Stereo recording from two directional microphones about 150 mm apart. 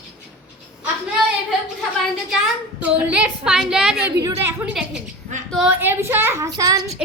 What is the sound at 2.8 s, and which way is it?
A woman's voice, 10° right (ahead or behind).